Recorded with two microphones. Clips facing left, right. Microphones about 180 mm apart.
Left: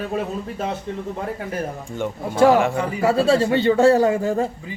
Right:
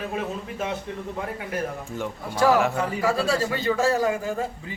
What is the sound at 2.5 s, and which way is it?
Speech, centre (ahead or behind).